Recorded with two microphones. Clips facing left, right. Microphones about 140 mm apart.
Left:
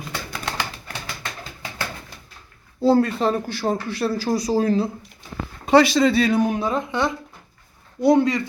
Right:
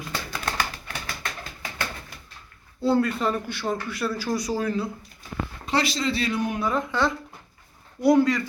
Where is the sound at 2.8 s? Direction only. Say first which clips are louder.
Left 5 dB; 35° left (ahead or behind).